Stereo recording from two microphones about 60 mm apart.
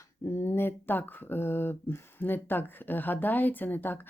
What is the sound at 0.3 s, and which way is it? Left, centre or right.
Speech, left.